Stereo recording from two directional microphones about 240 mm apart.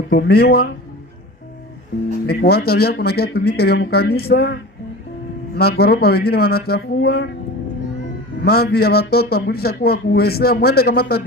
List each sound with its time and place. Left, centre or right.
0.1 s a man's voice: left
2.2 s a man's voice: left
5.5 s a man's voice: left
8.4 s a man's voice: left